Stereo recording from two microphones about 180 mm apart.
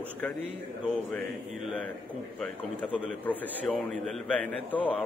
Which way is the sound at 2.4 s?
10° left (ahead or behind).